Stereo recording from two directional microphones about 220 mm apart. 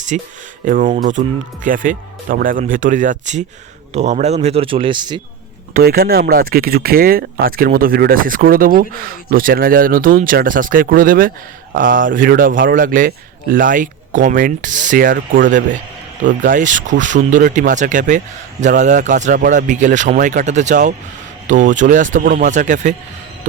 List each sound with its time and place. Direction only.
0.1 s a man's voice: 35° right (ahead or behind)
5.7 s speech: 45° right (ahead or behind)